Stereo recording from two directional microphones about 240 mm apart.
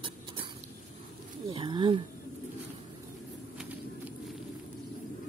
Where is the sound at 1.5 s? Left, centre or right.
Centre.